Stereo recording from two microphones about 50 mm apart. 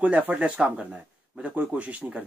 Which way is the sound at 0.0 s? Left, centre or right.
Right.